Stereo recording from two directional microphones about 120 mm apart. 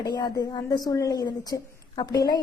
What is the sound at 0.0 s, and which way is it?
A woman's voice, 35° left (ahead or behind).